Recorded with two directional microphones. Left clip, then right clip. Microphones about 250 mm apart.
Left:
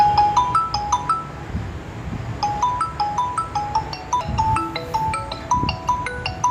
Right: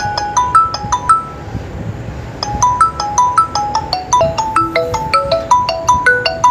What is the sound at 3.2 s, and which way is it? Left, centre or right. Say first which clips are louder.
Music: right 11 dB; right.